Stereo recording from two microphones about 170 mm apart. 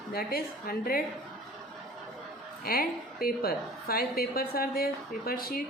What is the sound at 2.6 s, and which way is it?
Speech, 60° left (ahead or behind).